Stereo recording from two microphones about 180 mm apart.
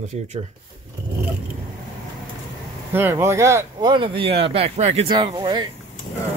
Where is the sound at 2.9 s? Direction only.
15° right (ahead or behind).